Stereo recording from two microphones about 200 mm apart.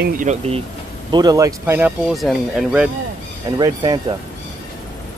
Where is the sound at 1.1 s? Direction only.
20° right (ahead or behind).